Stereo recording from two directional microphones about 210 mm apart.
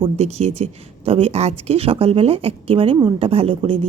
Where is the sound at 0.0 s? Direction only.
30° right (ahead or behind).